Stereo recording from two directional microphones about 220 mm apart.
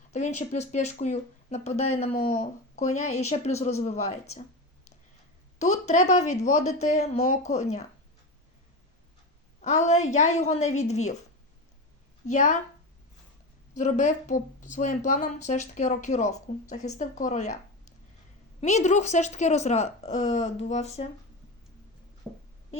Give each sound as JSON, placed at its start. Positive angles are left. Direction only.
{"t": 0.1, "sound": "speech", "side_deg": 30}
{"t": 5.5, "sound": "speech", "side_deg": 30}
{"t": 9.6, "sound": "speech", "side_deg": 30}
{"t": 12.2, "sound": "speech", "side_deg": 35}
{"t": 13.7, "sound": "speech", "side_deg": 35}
{"t": 18.6, "sound": "speech", "side_deg": 30}
{"t": 22.3, "sound": "speech", "side_deg": -10}